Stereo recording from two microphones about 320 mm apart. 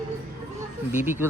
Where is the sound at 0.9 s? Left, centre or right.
Centre.